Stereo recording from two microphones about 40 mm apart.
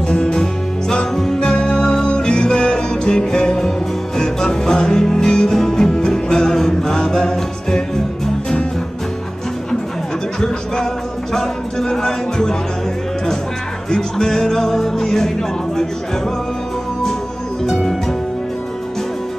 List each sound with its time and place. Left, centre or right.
0.1 s music: left
11.3 s music: centre
13.8 s music: centre
17.6 s music: centre